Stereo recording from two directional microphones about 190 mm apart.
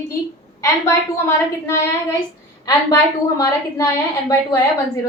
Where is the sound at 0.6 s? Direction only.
15° left (ahead or behind).